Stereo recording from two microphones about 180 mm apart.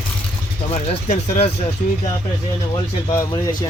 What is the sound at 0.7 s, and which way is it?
Speech, 35° left (ahead or behind).